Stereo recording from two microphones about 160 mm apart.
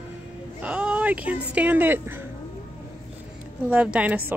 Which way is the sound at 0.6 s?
5° right (ahead or behind).